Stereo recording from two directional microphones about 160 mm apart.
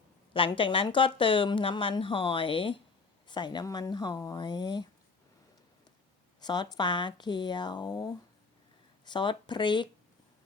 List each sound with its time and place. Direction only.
0.3 s speech: 35° left (ahead or behind)
6.4 s speech: 25° left (ahead or behind)